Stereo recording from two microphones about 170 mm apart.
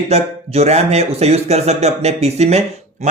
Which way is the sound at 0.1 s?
40° right (ahead or behind).